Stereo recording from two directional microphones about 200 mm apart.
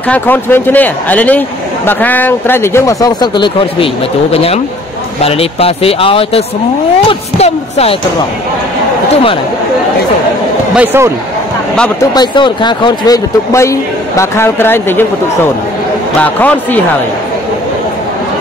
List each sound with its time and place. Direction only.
0.1 s speech: 10° left (ahead or behind); by 8.0 s 30° left (ahead or behind)
10.8 s speech: 10° right (ahead or behind)
12.1 s speech: 20° left (ahead or behind)
16.2 s speech: 10° left (ahead or behind)